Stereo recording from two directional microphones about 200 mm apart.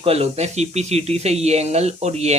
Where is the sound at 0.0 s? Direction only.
30° right (ahead or behind).